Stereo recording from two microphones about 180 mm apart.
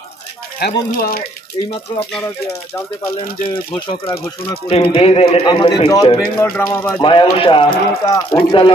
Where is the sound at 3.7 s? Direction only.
25° left (ahead or behind); by 7.0 s 10° left (ahead or behind).